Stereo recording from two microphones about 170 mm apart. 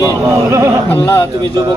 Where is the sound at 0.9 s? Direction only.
15° left (ahead or behind).